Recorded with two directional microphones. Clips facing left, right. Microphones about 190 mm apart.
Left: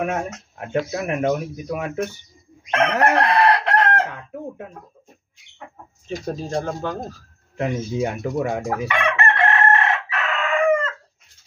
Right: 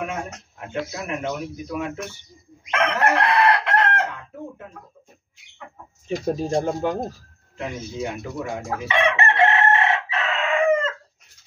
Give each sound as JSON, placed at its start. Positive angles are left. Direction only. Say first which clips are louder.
{"t": 0.6, "sound": "speech", "louder": "left 6 dB", "side_deg": 60}
{"t": 2.7, "sound": "chicken", "louder": "left 3 dB", "side_deg": 35}
{"t": 6.0, "sound": "speech", "louder": "right 4 dB", "side_deg": -15}
{"t": 7.5, "sound": "speech", "louder": "left 6 dB", "side_deg": 60}
{"t": 8.8, "sound": "chicken", "louder": "right 4 dB", "side_deg": -25}